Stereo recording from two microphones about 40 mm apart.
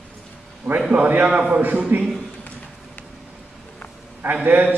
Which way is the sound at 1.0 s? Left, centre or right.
Right.